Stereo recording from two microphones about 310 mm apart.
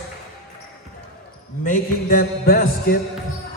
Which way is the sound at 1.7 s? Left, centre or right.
Left.